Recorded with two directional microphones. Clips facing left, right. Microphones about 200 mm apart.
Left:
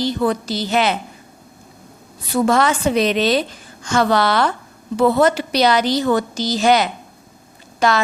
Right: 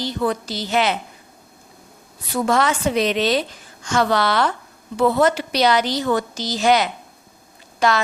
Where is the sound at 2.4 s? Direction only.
40° left (ahead or behind).